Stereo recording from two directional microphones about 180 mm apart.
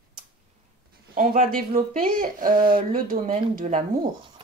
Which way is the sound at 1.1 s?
50° right (ahead or behind).